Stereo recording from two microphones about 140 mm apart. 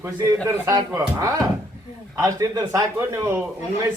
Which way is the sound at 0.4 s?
25° right (ahead or behind).